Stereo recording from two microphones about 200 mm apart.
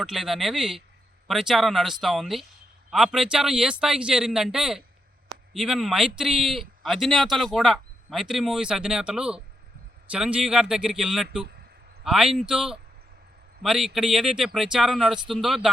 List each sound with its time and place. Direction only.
0.0 s speech: centre (ahead or behind)